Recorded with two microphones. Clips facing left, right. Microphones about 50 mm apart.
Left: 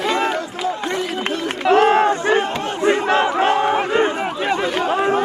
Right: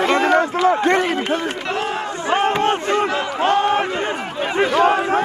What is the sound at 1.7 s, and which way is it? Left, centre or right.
Run, left.